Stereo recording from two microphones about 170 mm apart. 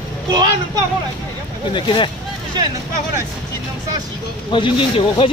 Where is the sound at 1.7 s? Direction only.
30° left (ahead or behind).